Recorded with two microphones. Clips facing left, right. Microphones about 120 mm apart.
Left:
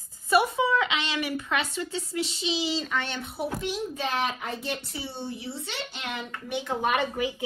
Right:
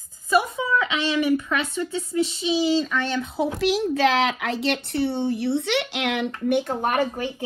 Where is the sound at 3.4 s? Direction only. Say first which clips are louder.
Right 8 dB; 90° right; by 6.7 s 60° right (ahead or behind).